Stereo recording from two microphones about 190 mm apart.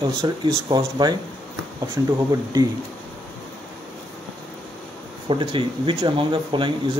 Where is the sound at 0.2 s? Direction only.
25° right (ahead or behind).